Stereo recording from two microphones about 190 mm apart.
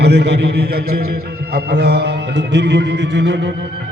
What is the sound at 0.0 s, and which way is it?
Music, 60° right (ahead or behind).